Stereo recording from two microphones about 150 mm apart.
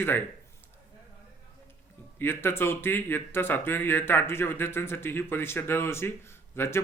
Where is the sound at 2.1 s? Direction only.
15° left (ahead or behind).